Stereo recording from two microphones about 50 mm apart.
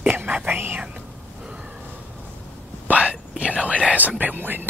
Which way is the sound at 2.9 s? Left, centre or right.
Right.